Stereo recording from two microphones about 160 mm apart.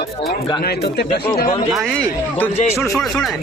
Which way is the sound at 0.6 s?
85° left.